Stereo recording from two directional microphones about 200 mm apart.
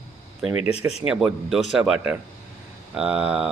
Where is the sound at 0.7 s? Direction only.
30° left (ahead or behind).